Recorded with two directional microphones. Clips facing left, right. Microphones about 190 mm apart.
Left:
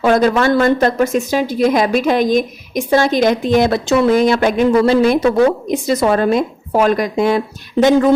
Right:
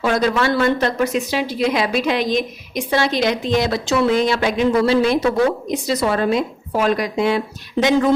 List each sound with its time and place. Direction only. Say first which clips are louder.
0.0 s a woman's voice: left 5 dB; 50° left (ahead or behind)